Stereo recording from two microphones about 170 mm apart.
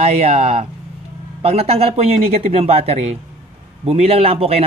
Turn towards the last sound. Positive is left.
turn(degrees=-35)  # may be behind; listen again after turning